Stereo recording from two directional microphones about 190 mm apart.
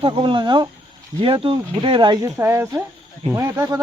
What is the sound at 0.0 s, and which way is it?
Speech, 25° right (ahead or behind).